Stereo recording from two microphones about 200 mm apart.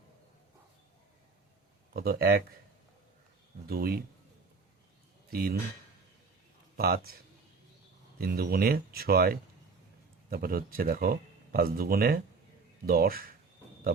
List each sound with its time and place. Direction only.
1.9 s speech: 50° right (ahead or behind)
3.7 s speech: 50° right (ahead or behind)
5.3 s speech: 50° right (ahead or behind)
6.7 s speech: 50° right (ahead or behind)
8.2 s speech: 50° right (ahead or behind)